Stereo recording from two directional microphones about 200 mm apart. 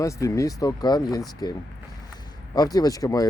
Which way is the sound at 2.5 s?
20° left (ahead or behind).